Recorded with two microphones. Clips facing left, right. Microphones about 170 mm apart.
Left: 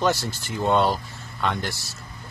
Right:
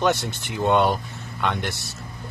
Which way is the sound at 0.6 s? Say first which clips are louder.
Right 1 dB; 20° right (ahead or behind).